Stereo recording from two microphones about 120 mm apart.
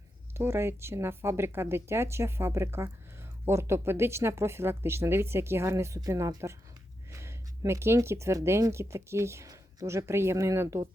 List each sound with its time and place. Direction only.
0.3 s speech: 20° right (ahead or behind)